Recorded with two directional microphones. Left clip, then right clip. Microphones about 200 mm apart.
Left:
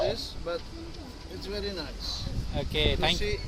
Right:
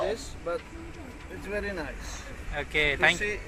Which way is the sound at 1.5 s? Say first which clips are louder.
Right 2 dB; 20° right (ahead or behind).